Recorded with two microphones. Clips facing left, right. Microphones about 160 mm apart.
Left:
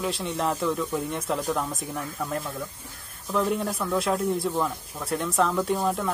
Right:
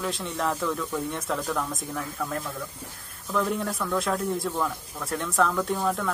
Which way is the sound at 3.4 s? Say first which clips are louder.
Left 2 dB; centre (ahead or behind).